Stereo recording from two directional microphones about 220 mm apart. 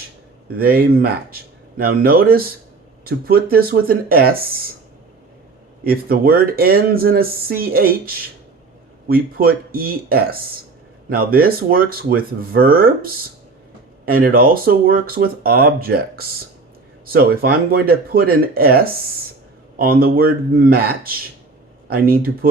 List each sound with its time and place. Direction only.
0.5 s speech: 40° right (ahead or behind)
5.8 s speech: 40° right (ahead or behind)
19.8 s speech: 40° right (ahead or behind)